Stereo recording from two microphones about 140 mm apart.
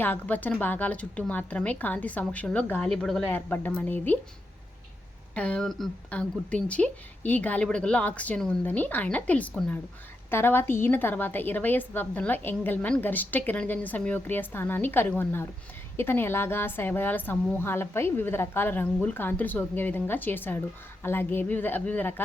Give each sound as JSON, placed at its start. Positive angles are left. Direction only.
{"t": 0.0, "sound": "a woman's voice", "side_deg": 10}
{"t": 5.3, "sound": "a woman's voice", "side_deg": 10}